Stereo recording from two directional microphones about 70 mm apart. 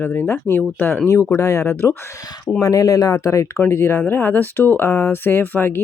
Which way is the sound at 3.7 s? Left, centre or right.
Left.